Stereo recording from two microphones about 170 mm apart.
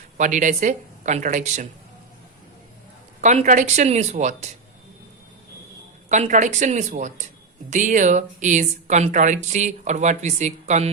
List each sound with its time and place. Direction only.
0.2 s speech: 45° right (ahead or behind)
3.2 s speech: 45° right (ahead or behind)
6.1 s speech: 45° right (ahead or behind)